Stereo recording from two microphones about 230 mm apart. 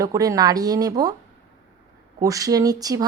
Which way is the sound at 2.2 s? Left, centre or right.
Centre.